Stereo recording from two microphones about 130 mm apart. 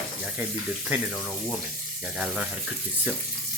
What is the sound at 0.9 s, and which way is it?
Speech, 10° right (ahead or behind).